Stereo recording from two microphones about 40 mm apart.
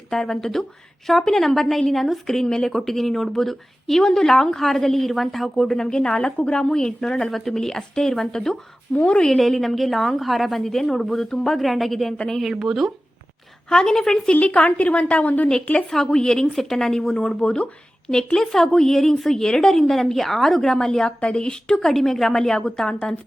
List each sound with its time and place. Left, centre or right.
0.1 s a woman's voice: centre
9.0 s a woman's voice: left
9.3 s a woman's voice: centre
11.6 s a woman's voice: centre
12.4 s speech: centre
13.7 s a woman's voice: centre
14.4 s a woman's voice: left
16.0 s a woman's voice: centre
17.4 s a woman's voice: left
18.3 s a woman's voice: centre
21.2 s a woman's voice: left
21.8 s a woman's voice: centre